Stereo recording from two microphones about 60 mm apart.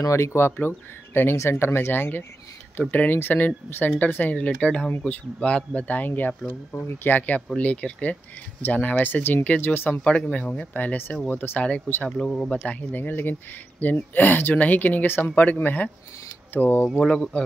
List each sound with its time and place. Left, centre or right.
0.1 s speech: left
12.0 s speech: centre
12.6 s speech: left
17.0 s speech: centre